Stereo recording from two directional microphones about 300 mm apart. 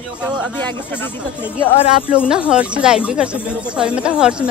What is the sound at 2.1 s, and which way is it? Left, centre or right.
A woman's voice, centre.